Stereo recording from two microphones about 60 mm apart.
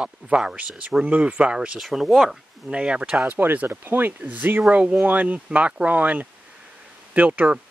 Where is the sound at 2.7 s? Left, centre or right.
Centre.